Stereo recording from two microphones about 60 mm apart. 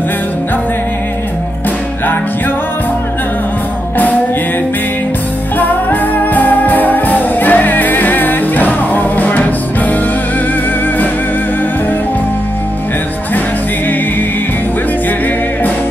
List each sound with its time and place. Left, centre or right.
5.6 s music: left